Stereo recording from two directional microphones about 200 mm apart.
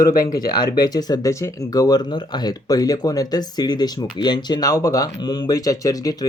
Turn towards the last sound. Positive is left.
turn(degrees=20)  # may be behind; listen again after turning